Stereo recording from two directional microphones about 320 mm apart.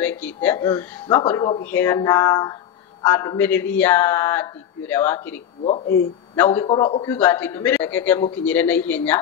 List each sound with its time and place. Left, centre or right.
0.0 s a man's voice: centre
5.6 s speech: centre
6.3 s a man's voice: centre